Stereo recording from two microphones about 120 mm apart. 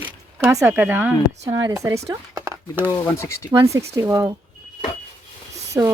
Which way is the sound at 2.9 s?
25° left (ahead or behind).